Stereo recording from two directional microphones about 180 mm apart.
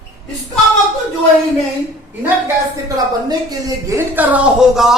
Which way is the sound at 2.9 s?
20° right (ahead or behind).